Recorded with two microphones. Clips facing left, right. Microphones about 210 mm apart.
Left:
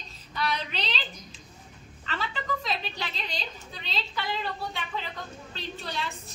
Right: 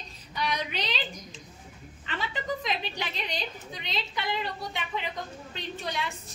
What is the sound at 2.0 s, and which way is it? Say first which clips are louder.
A woman's voice: right 1 dB; 15° right (ahead or behind).